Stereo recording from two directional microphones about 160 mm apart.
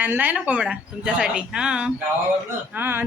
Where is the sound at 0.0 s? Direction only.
10° right (ahead or behind).